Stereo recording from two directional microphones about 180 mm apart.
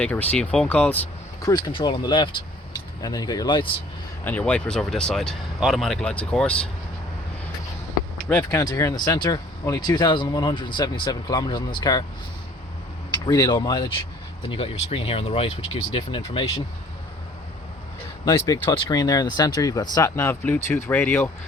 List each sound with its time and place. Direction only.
0.0 s speech: 10° left (ahead or behind)
1.4 s speech: 20° left (ahead or behind)
4.2 s speech: 10° left (ahead or behind)
8.4 s speech: 20° left (ahead or behind)
13.1 s speech: 20° left (ahead or behind)
18.3 s speech: 15° left (ahead or behind)